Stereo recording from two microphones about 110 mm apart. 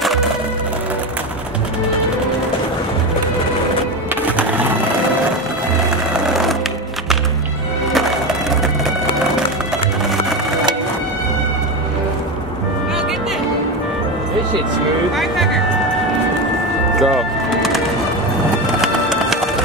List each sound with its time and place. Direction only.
4.4 s a sound: 15° right (ahead or behind)
6.1 s sewing machine: 5° right (ahead or behind)
7.9 s music: centre (ahead or behind)
17.0 s bird: centre (ahead or behind)
18.8 s music: 5° right (ahead or behind)